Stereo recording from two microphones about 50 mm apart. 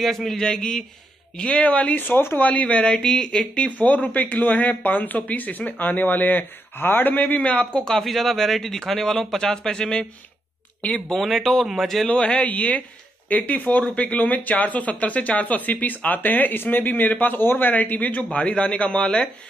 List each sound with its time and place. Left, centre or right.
0.0 s speech: centre
0.4 s speech: centre
8.0 s speech: centre
10.8 s speech: left
11.1 s speech: centre
12.1 s speech: left